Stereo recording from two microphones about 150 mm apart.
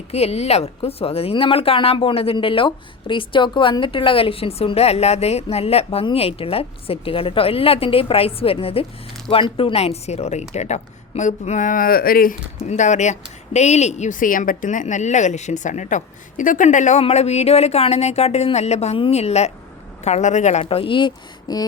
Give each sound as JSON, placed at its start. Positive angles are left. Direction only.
{"t": 0.1, "sound": "a woman's voice", "side_deg": 45}
{"t": 12.6, "sound": "a woman's voice", "side_deg": 50}